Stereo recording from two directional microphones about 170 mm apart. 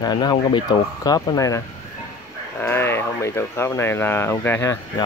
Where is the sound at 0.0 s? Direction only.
25° left (ahead or behind).